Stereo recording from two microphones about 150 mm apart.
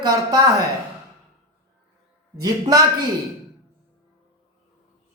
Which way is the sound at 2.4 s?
25° right (ahead or behind).